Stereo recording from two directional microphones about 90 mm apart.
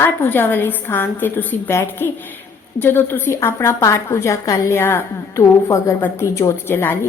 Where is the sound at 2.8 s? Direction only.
25° left (ahead or behind).